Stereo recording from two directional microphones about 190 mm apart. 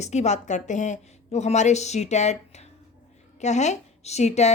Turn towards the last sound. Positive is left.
turn(degrees=35)  # may be behind; listen again after turning